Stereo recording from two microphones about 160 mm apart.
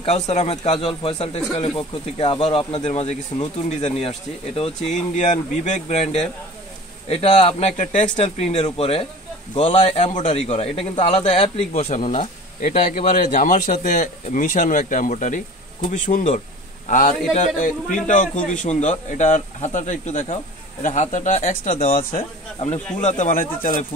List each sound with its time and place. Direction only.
0.0 s speech: 40° left (ahead or behind)
12.0 s speech: 50° left (ahead or behind)